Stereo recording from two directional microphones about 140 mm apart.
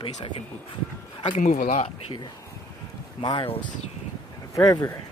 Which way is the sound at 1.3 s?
75° left (ahead or behind).